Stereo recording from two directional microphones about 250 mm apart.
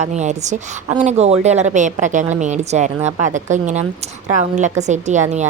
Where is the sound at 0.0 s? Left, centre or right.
Right.